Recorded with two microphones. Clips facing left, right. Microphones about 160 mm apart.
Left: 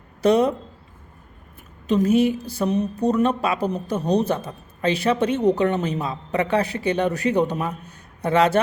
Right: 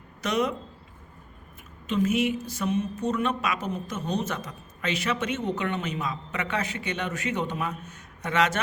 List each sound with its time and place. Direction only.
0.2 s speech: 30° left (ahead or behind)
1.9 s speech: 35° left (ahead or behind)